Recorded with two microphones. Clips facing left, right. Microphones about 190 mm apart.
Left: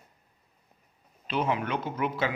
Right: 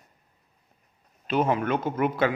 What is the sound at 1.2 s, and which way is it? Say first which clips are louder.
Speech: right 5 dB; 45° right (ahead or behind).